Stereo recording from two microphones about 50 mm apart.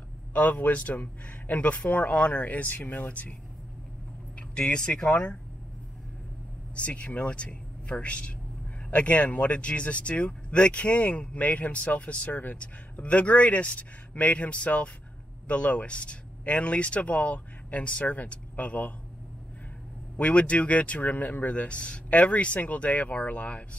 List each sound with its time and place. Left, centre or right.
0.3 s speech: left
4.4 s speech: centre
6.7 s speech: left
20.2 s speech: left